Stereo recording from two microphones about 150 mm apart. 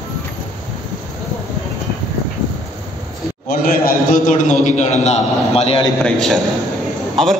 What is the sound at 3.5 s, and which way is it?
A man's voice, 75° left (ahead or behind).